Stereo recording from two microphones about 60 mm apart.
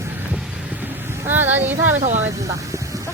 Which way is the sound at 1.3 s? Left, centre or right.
Right.